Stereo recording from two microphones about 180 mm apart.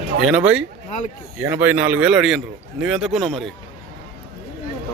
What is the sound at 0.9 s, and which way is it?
Speech, 40° left (ahead or behind).